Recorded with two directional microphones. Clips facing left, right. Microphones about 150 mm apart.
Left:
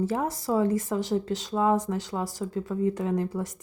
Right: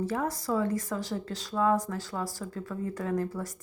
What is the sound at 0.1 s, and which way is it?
A woman's voice, 25° left (ahead or behind).